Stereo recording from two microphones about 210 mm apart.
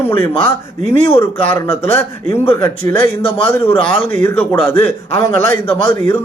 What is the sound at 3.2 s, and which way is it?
Speech, 25° left (ahead or behind).